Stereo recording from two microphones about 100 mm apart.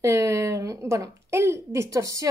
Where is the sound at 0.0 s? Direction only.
30° right (ahead or behind).